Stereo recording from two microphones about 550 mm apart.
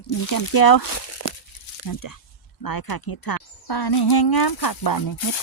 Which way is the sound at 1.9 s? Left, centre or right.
Left.